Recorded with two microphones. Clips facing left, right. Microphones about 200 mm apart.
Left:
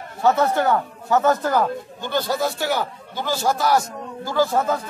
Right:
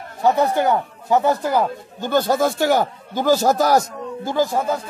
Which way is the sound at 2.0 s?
45° right (ahead or behind).